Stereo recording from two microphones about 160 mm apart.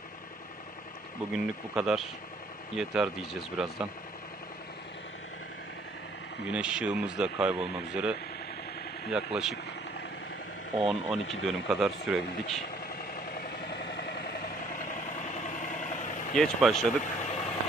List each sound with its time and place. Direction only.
1.3 s speech: 5° right (ahead or behind)
6.5 s a man's voice: 5° right (ahead or behind)
10.8 s speech: centre (ahead or behind)
13.7 s vehicle: 90° left; by 14.8 s 70° left (ahead or behind)
15.2 s vehicle: 50° left (ahead or behind)
16.3 s speech: centre (ahead or behind)
16.7 s speech: 45° left (ahead or behind)